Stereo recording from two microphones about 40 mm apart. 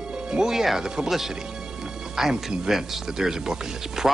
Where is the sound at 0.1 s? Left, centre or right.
Centre.